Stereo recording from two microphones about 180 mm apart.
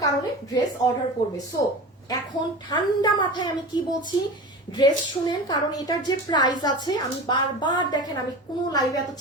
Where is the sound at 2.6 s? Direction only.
25° left (ahead or behind).